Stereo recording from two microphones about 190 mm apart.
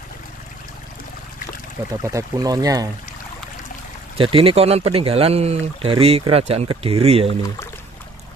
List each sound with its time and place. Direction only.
2.0 s speech: 15° right (ahead or behind)
4.2 s speech: 30° right (ahead or behind)